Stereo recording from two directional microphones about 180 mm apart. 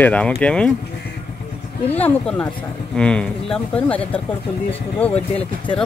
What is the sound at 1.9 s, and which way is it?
Speech, 10° left (ahead or behind).